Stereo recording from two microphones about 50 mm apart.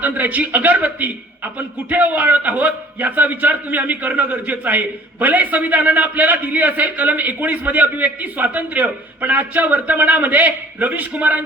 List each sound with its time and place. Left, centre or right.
0.0 s a man's voice: right